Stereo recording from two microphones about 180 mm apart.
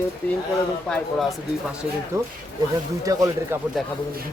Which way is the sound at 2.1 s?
15° right (ahead or behind).